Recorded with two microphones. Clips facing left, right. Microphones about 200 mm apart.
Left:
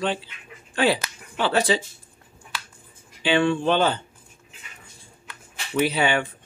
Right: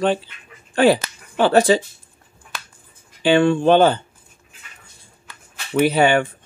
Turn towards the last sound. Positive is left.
turn(degrees=-50)  # may be behind; listen again after turning